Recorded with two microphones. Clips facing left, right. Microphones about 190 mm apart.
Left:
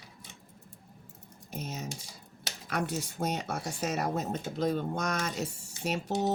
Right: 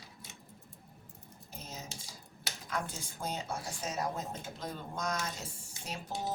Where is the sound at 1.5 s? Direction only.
75° left (ahead or behind).